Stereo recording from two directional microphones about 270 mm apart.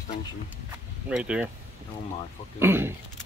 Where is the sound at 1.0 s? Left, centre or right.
Centre.